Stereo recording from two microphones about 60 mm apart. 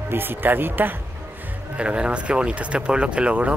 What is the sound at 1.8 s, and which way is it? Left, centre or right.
Speech, centre.